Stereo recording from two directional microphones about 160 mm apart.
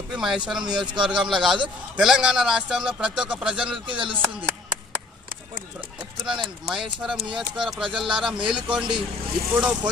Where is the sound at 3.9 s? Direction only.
30° right (ahead or behind).